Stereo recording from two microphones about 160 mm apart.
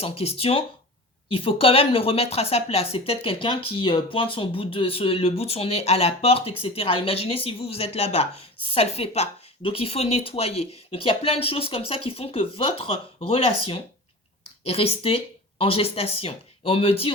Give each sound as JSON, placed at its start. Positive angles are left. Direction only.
{"t": 0.0, "sound": "speech", "side_deg": 40}